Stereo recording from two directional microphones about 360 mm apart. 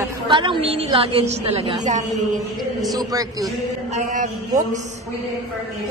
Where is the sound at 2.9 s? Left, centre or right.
Centre.